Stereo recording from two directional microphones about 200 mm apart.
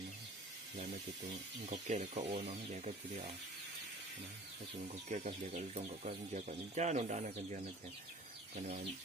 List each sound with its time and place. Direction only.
1.7 s speech: 35° right (ahead or behind)
5.0 s speech: 35° right (ahead or behind)
8.5 s speech: 35° right (ahead or behind)